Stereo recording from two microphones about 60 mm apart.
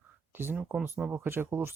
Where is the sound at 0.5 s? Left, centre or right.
Centre.